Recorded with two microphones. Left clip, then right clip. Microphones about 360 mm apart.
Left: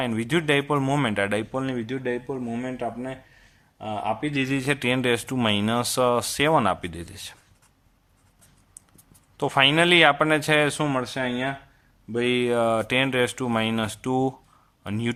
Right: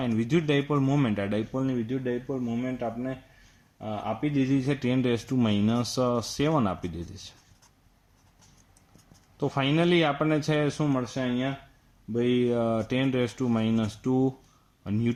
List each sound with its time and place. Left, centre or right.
0.0 s speech: left
9.4 s speech: left